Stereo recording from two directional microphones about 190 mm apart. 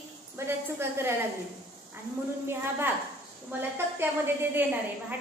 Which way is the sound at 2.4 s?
10° right (ahead or behind).